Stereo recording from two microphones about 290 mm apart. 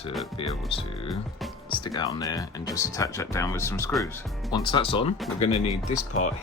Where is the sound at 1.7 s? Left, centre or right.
Centre.